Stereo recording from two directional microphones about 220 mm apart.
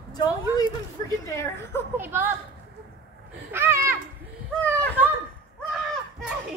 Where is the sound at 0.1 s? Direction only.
20° left (ahead or behind).